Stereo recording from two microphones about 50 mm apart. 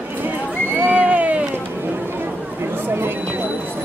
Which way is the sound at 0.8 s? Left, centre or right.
Right.